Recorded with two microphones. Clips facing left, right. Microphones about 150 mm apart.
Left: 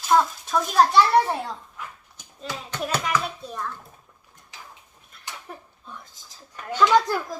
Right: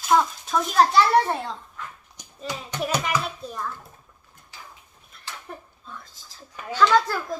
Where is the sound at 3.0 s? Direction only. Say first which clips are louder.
Even; centre (ahead or behind).